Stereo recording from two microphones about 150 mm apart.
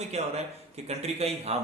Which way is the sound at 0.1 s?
45° right (ahead or behind).